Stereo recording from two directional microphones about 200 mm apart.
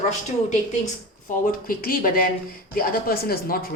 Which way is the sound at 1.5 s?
45° left (ahead or behind).